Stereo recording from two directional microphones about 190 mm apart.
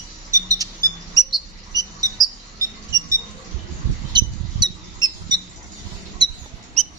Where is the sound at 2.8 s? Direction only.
15° right (ahead or behind).